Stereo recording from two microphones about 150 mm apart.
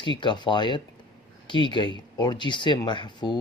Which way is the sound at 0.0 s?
30° left (ahead or behind).